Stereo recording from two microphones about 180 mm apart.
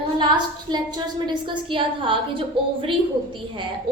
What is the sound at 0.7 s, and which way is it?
A woman's voice, 25° right (ahead or behind).